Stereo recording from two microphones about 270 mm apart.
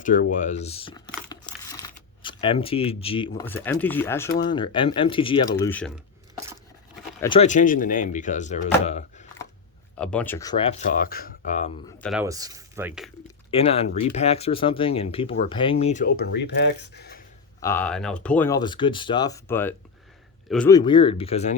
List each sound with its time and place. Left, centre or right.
0.0 s crumpling: left
3.4 s speech: centre
6.3 s a sound: centre
7.2 s speech: centre
10.0 s speech: centre; by 11.8 s left
12.2 s speech: centre
13.6 s speech: left
17.6 s speech: centre